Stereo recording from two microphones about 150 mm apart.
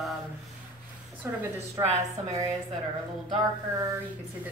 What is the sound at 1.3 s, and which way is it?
Speech, 15° right (ahead or behind).